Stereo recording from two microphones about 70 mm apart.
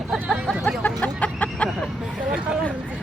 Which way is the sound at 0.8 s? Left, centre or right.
Left.